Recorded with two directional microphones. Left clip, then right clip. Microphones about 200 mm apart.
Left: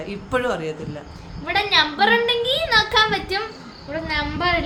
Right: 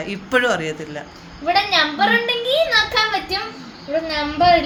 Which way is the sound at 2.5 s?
15° left (ahead or behind).